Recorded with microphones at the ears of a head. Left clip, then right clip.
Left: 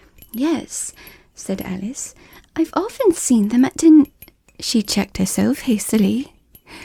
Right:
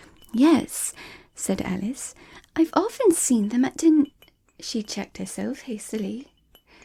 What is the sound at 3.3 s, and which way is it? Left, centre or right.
Speech, left.